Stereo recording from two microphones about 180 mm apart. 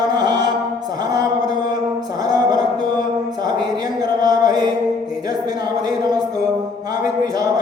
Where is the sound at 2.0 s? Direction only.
20° right (ahead or behind).